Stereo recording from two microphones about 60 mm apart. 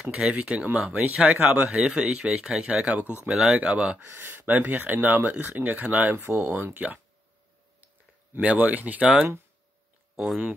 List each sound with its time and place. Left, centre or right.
0.3 s speech: centre
1.7 s speech: centre
4.0 s speech: right
7.8 s speech: right
10.1 s speech: centre